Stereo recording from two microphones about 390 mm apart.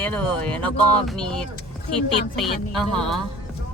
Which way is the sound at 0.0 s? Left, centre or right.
Centre.